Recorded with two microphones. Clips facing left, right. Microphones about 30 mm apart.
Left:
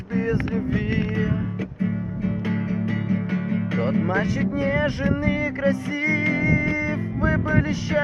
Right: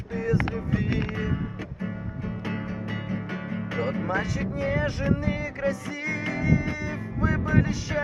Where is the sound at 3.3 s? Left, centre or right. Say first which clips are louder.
Left 7 dB; left.